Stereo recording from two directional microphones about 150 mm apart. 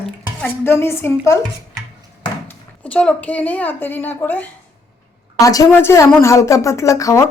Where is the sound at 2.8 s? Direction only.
10° left (ahead or behind).